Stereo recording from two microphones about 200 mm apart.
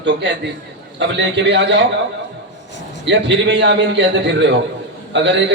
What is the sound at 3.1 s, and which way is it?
A man's voice, 65° right (ahead or behind).